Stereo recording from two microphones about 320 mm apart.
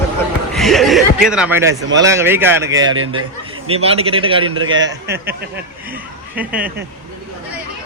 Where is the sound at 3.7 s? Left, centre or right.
Centre.